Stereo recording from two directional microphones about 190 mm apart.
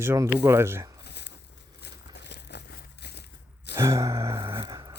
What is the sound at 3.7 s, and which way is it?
Gasp, 15° right (ahead or behind).